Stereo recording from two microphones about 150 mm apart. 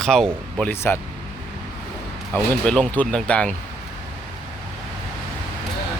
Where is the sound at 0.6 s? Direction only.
15° left (ahead or behind).